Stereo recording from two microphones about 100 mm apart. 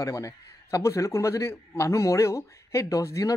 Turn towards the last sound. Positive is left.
turn(degrees=30)  # may be behind; listen again after turning